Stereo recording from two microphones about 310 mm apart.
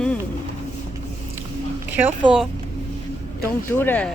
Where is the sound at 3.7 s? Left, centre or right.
Centre.